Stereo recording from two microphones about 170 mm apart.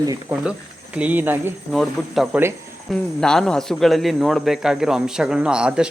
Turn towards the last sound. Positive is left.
turn(degrees=-5)  # may be behind; listen again after turning